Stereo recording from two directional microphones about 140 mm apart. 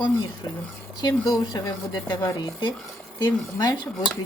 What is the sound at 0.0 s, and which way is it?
Speech, 30° left (ahead or behind).